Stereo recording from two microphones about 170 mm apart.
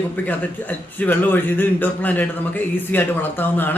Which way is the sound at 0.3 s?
10° left (ahead or behind).